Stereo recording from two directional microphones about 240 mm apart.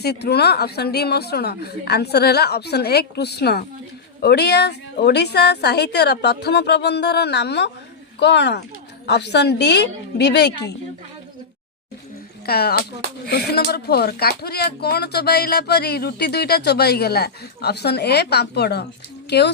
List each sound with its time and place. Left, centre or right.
0.0 s a woman's voice: left
12.5 s speech: left